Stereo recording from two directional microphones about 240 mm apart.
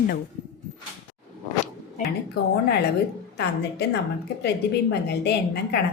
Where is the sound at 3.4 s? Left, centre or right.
Left.